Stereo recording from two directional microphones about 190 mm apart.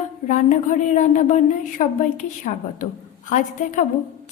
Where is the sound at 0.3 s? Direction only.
40° left (ahead or behind).